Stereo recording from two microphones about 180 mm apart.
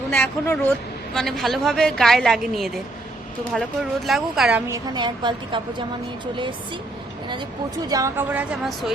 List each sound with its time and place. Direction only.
0.1 s a man's voice: 15° left (ahead or behind); by 4.6 s 5° right (ahead or behind)
4.7 s a woman's voice: 25° right (ahead or behind)
7.9 s a woman's voice: 20° right (ahead or behind)